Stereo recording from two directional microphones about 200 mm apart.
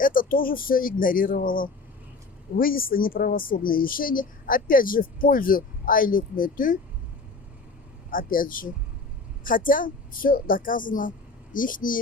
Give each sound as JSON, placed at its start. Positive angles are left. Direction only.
{"t": 0.0, "sound": "a woman's voice", "side_deg": 45}
{"t": 8.1, "sound": "a woman's voice", "side_deg": 45}